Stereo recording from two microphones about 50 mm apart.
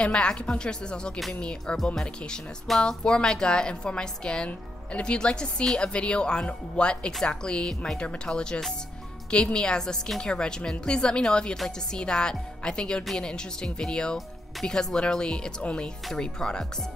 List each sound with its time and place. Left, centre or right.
0.0 s speech: centre
2.0 s speech: centre